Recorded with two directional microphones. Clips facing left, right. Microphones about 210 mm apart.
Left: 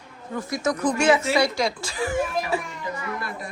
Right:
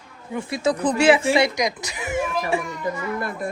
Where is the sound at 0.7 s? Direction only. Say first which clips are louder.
Right 3 dB; 35° right (ahead or behind).